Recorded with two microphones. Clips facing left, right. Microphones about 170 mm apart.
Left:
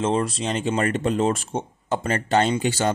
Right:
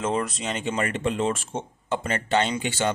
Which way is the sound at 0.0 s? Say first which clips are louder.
Left 4 dB; 30° left (ahead or behind).